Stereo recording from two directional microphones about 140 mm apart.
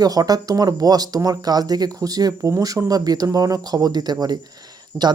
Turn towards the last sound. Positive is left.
turn(degrees=-15)  # may be behind; listen again after turning